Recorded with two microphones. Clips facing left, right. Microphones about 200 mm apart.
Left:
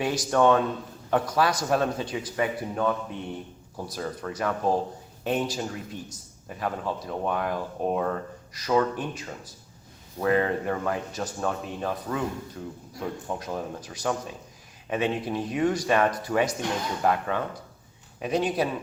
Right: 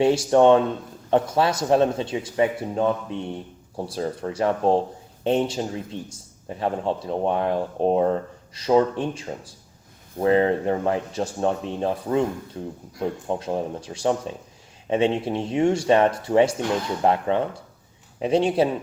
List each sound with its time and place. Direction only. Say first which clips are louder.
0.0 s a man's voice: right 6 dB; 25° right (ahead or behind)